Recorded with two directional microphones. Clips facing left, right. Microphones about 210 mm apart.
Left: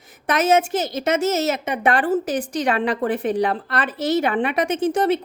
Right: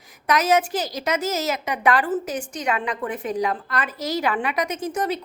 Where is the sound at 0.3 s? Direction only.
25° left (ahead or behind).